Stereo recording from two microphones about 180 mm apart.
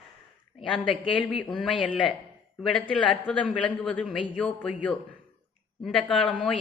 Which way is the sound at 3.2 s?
5° left (ahead or behind).